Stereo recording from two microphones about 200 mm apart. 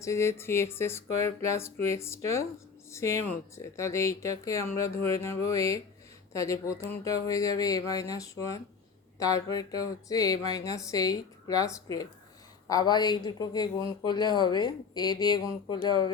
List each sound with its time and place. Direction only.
0.0 s speech: 15° left (ahead or behind)